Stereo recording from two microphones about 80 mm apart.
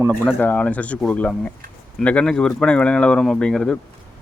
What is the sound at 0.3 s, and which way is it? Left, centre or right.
Speech, centre.